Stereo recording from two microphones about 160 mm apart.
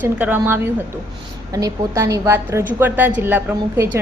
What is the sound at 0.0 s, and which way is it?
A woman's voice, 10° right (ahead or behind).